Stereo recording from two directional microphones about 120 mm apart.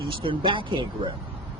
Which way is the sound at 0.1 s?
45° right (ahead or behind).